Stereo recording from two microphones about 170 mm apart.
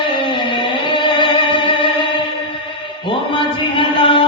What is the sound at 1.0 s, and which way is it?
Music, 30° left (ahead or behind).